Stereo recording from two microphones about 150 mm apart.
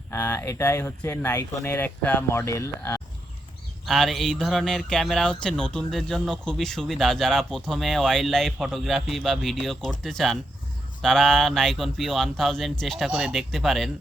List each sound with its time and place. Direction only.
0.1 s speech: 15° left (ahead or behind)
3.8 s speech: centre (ahead or behind)
4.4 s a sound: 5° right (ahead or behind)
4.6 s speech: 5° left (ahead or behind)